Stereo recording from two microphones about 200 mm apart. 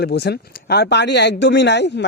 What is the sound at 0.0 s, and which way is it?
Speech, 55° left (ahead or behind).